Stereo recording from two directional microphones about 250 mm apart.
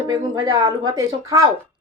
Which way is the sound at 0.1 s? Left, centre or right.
Centre.